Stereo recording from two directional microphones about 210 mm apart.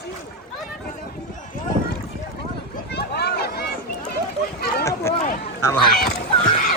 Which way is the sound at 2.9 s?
50° left (ahead or behind).